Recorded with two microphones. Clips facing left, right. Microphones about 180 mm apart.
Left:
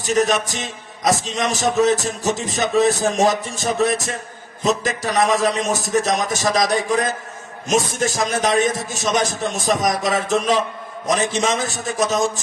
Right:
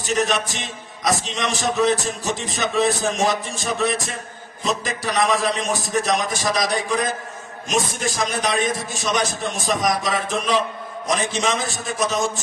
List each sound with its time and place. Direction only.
0.0 s a man's voice: 40° left (ahead or behind)